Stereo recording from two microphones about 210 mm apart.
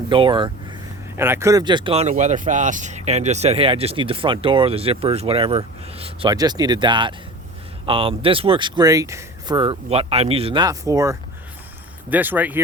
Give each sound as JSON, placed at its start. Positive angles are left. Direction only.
{"t": 0.1, "sound": "speech", "side_deg": -25}
{"t": 1.1, "sound": "speech", "side_deg": -10}